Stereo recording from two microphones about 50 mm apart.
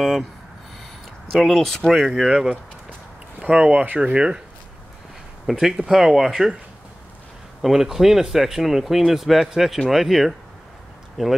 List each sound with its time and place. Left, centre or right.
0.0 s speech: centre
1.3 s speech: centre
1.9 s speech: centre
3.3 s speech: right
5.5 s speech: centre
7.6 s speech: centre